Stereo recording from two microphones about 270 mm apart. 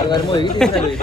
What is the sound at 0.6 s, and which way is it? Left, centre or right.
Speech, centre.